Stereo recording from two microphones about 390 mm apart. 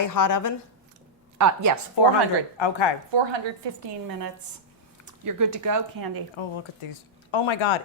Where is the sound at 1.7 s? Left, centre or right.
Right.